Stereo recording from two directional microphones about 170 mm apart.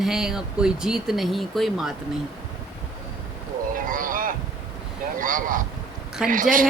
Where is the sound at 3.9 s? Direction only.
55° right (ahead or behind).